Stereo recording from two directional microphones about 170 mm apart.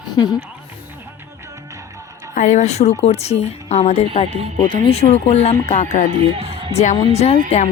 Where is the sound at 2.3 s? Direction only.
50° left (ahead or behind).